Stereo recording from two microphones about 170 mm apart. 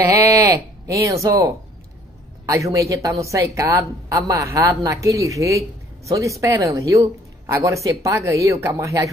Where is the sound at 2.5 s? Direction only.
20° right (ahead or behind).